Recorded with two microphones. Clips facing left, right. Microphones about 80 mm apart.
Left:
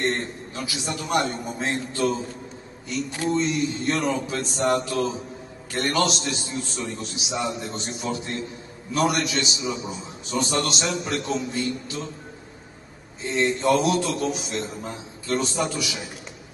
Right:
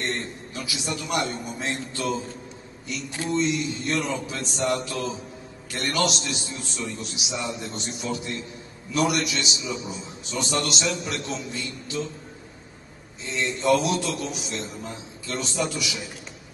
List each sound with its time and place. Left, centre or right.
0.0 s a man's voice: left
13.3 s a man's voice: left